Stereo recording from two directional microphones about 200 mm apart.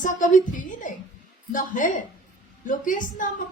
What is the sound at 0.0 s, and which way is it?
A man's voice, 40° left (ahead or behind).